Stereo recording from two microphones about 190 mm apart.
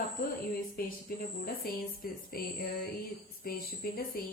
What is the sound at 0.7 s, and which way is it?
Speech, 50° left (ahead or behind).